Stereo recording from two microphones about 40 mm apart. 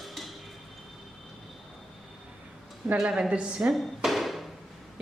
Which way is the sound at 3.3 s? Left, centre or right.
Right.